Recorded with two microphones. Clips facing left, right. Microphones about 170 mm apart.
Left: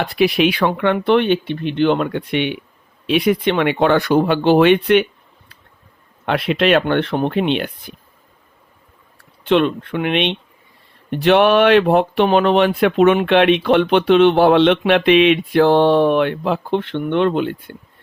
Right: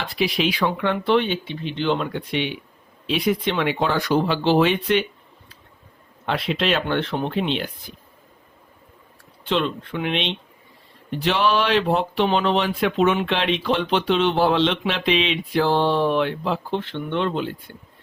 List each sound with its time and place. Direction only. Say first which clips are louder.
0.0 s speech: left 7 dB; 60° left (ahead or behind)
6.2 s speech: left 6 dB; 60° left (ahead or behind)
9.1 s speech: left 8 dB; 60° left (ahead or behind)